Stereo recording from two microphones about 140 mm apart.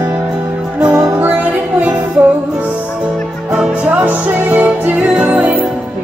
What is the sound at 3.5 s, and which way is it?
Music, 10° right (ahead or behind).